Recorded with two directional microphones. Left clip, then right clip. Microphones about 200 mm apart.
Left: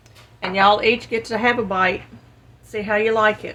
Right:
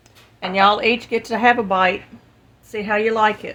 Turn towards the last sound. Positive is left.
turn(degrees=-30)  # may be behind; listen again after turning